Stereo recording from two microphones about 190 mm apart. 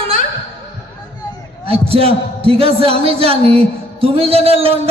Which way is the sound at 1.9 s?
30° right (ahead or behind).